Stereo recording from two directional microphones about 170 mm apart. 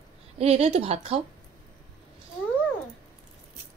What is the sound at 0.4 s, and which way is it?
Speech, 40° right (ahead or behind).